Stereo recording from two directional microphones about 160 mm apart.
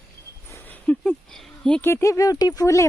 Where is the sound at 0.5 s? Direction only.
10° left (ahead or behind).